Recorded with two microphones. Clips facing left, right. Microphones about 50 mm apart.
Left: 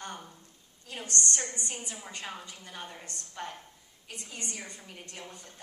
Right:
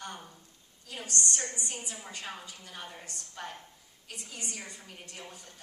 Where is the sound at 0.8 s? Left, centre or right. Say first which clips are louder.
Left 2 dB; left.